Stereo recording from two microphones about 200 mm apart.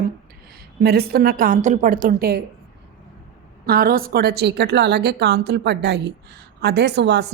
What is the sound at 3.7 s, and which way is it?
A woman's voice, 50° right (ahead or behind).